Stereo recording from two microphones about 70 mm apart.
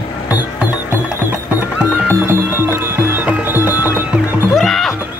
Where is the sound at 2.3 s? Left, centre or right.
Right.